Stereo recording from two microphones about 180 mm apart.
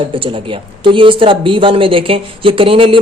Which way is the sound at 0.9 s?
30° right (ahead or behind).